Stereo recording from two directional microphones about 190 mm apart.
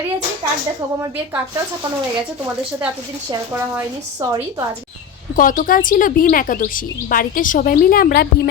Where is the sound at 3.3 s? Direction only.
15° right (ahead or behind).